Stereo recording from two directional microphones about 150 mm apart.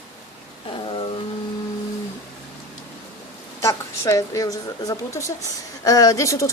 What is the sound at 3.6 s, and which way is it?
A woman's voice, 20° left (ahead or behind).